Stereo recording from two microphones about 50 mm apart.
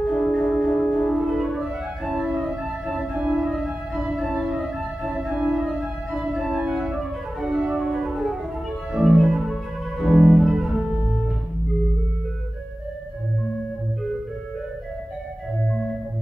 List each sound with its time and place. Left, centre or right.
0.0 s music: centre
1.1 s music: centre
2.1 s organ: centre
4.4 s music: centre
5.1 s organ: right
5.5 s organ: centre
7.7 s music: centre
8.0 s music: centre